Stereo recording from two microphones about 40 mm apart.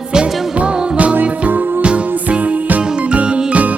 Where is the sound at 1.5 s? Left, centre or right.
Right.